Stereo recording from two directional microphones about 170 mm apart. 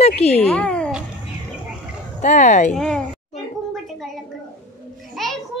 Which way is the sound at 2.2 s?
45° left (ahead or behind).